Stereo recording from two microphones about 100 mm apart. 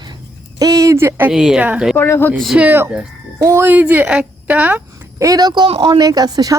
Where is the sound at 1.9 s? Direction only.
20° left (ahead or behind).